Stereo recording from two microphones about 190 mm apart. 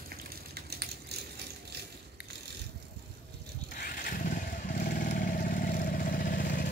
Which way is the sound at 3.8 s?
45° left (ahead or behind).